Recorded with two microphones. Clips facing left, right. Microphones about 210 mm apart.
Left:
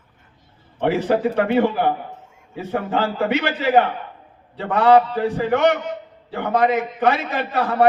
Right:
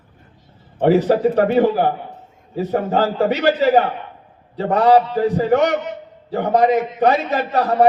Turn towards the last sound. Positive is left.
turn(degrees=-40)  # may be behind; listen again after turning